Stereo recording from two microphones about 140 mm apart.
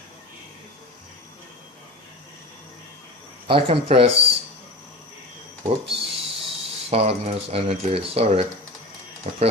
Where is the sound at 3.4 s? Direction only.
40° right (ahead or behind).